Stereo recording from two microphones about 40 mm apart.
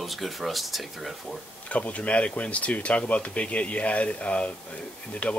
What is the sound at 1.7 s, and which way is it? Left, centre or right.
Speech, left.